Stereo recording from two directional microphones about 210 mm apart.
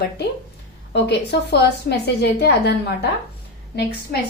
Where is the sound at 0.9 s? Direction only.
55° left (ahead or behind).